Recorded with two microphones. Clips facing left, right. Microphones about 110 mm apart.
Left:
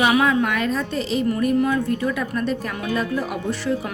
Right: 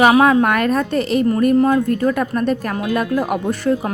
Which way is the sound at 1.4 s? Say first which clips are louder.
Right 6 dB; 45° right (ahead or behind).